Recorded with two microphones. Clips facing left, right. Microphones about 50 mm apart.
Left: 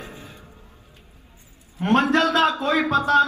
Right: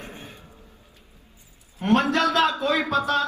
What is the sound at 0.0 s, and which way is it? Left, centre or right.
Music, right.